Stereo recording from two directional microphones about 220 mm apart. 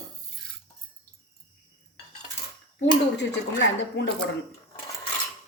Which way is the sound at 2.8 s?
55° left (ahead or behind).